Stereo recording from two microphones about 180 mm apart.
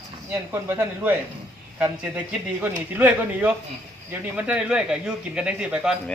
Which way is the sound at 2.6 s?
10° right (ahead or behind).